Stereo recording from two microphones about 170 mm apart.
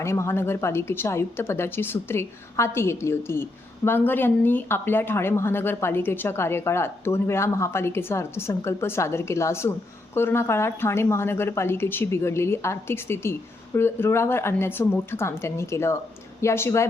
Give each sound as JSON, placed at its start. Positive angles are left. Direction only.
{"t": 0.0, "sound": "speech", "side_deg": 15}